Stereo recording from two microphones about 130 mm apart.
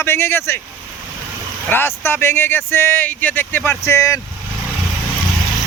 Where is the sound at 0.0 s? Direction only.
20° left (ahead or behind).